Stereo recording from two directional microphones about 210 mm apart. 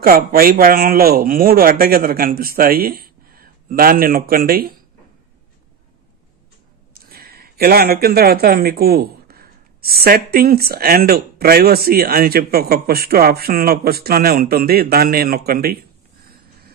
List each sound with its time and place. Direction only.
0.0 s speech: 45° right (ahead or behind)
6.9 s speech: 45° right (ahead or behind)